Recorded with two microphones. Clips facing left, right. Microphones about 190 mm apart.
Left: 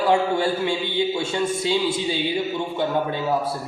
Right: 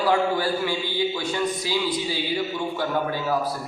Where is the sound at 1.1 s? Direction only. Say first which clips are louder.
Left 2 dB; 25° left (ahead or behind).